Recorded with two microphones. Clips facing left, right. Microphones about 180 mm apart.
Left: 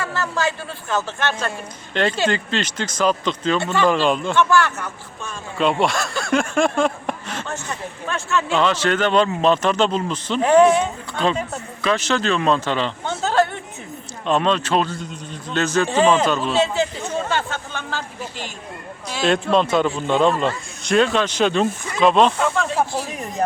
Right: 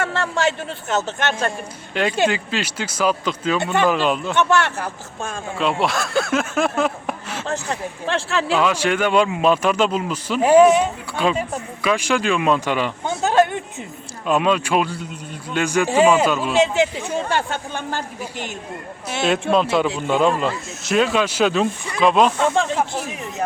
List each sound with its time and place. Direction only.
0.0 s speech: 25° right (ahead or behind)
1.9 s a man's voice: 5° right (ahead or behind)
4.4 s speech: 25° right (ahead or behind)
5.5 s speech: centre (ahead or behind)
8.5 s a man's voice: 10° right (ahead or behind)
22.4 s speech: 30° right (ahead or behind)